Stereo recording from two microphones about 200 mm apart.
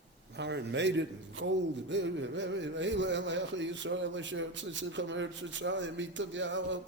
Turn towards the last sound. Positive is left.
turn(degrees=-65)  # may be behind; listen again after turning